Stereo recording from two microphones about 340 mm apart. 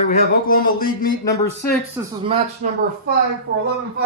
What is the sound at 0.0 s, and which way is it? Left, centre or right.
Speech, left.